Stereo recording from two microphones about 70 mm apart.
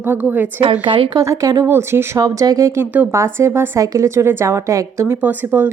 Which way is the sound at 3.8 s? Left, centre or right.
Right.